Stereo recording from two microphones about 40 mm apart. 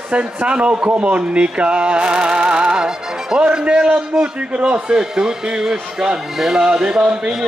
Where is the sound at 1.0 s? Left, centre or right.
Right.